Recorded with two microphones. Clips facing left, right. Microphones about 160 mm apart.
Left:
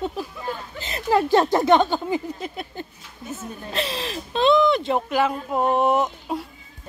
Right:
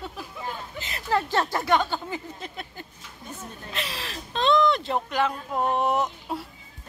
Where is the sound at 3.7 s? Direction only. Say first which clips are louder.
Left 8 dB; 30° left (ahead or behind).